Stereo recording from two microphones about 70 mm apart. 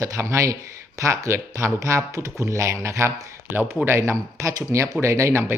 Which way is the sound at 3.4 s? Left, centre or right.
Right.